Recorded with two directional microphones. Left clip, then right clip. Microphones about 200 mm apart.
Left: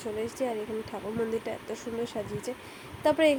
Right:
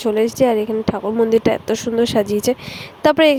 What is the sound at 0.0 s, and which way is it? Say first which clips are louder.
Speech: right 16 dB; 45° right (ahead or behind).